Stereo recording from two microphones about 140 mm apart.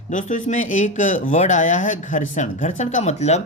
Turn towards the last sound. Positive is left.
turn(degrees=50)  # may be behind; listen again after turning